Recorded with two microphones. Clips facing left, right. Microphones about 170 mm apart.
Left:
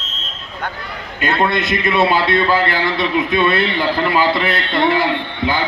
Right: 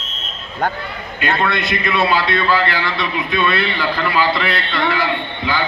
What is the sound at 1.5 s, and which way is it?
Speech, 45° left (ahead or behind).